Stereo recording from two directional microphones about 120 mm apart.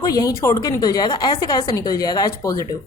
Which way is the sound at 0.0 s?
30° left (ahead or behind).